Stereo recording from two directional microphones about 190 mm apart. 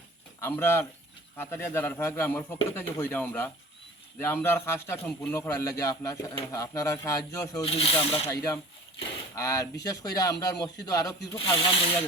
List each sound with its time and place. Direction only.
0.3 s a man's voice: 10° left (ahead or behind)
7.6 s speech: 30° left (ahead or behind)
9.0 s speech: 15° left (ahead or behind)